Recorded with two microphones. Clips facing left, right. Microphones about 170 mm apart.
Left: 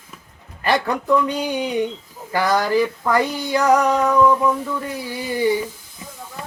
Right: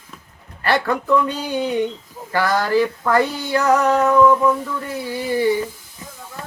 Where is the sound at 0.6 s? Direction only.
15° left (ahead or behind).